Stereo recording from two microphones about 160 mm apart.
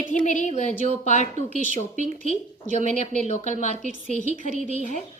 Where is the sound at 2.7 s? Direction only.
45° left (ahead or behind).